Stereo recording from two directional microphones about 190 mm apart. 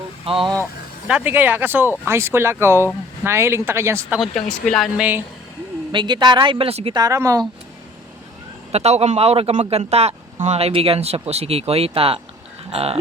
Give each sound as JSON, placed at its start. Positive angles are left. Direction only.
{"t": 0.3, "sound": "a woman's voice", "side_deg": -30}
{"t": 1.0, "sound": "speech", "side_deg": -5}
{"t": 4.2, "sound": "speech", "side_deg": 0}
{"t": 5.9, "sound": "a woman's voice", "side_deg": -25}
{"t": 7.0, "sound": "speech", "side_deg": -15}
{"t": 8.7, "sound": "speech", "side_deg": -35}